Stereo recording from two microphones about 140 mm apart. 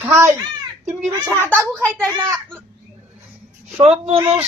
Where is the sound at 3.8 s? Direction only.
45° right (ahead or behind).